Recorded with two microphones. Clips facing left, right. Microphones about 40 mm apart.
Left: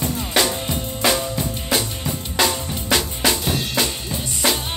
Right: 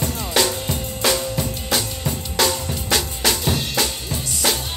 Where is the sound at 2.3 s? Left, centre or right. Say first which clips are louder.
Even; centre.